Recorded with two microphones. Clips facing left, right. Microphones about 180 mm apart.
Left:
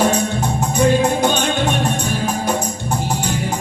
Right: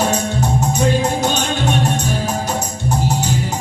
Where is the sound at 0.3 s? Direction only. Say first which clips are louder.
Even; 55° left (ahead or behind).